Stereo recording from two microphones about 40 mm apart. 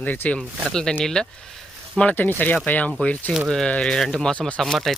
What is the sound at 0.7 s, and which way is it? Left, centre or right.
Speech, centre.